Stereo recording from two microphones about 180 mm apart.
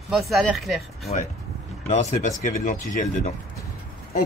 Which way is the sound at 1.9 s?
40° left (ahead or behind).